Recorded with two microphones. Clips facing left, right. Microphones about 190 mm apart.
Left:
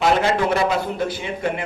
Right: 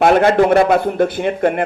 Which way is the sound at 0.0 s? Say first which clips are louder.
Right 7 dB; 55° right (ahead or behind).